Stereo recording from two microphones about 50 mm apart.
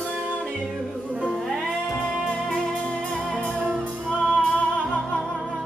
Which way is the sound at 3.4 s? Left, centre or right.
Right.